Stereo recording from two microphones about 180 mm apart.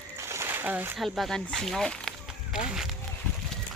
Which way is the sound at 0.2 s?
15° right (ahead or behind).